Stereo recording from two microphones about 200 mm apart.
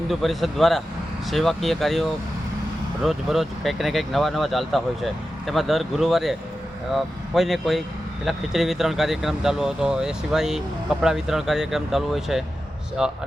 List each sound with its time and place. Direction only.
0.1 s speech: centre (ahead or behind)